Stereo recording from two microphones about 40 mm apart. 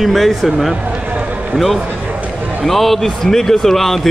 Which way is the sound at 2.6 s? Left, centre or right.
Centre.